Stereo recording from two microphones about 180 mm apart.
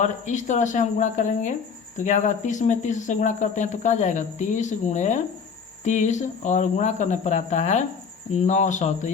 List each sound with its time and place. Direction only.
0.0 s speech: 45° left (ahead or behind)